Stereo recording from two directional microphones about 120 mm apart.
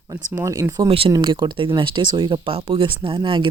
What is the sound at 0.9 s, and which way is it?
Speech, 50° right (ahead or behind).